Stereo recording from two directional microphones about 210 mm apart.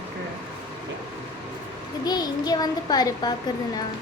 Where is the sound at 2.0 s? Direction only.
20° left (ahead or behind).